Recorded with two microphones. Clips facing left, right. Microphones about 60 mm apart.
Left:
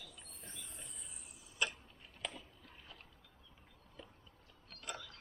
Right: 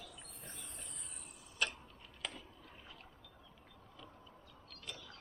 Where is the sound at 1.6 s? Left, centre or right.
Centre.